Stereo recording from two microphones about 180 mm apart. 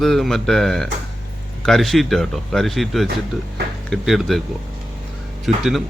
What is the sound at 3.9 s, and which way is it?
Speech, centre (ahead or behind).